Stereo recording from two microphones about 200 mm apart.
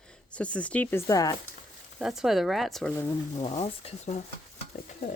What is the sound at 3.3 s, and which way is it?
Stir, 35° left (ahead or behind).